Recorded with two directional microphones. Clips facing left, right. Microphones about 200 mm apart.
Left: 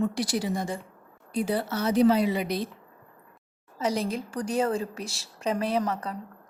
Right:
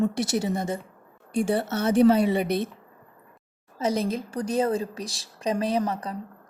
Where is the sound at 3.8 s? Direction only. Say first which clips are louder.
Right 2 dB; 20° right (ahead or behind).